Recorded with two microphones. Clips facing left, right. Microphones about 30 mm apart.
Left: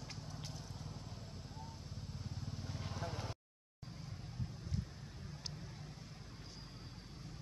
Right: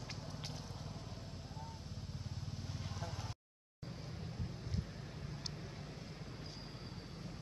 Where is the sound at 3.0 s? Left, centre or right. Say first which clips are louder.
Left 4 dB; centre.